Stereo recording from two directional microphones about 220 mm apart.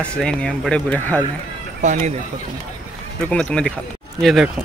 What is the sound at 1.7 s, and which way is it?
Speech, 35° right (ahead or behind).